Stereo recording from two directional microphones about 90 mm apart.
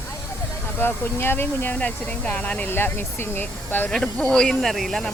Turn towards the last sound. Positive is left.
turn(degrees=5)  # may be behind; listen again after turning